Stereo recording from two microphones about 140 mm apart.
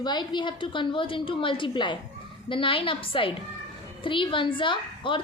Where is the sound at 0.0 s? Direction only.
30° left (ahead or behind).